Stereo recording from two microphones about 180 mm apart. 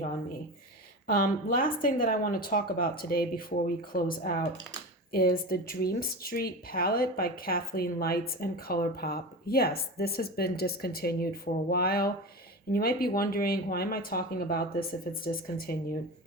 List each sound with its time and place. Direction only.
1.0 s a woman's voice: 55° left (ahead or behind)